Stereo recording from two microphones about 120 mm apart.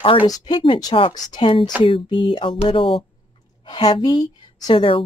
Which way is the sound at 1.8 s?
45° left (ahead or behind).